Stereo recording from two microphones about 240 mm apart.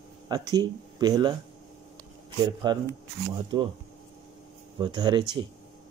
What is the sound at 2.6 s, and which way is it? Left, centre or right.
Speech, centre.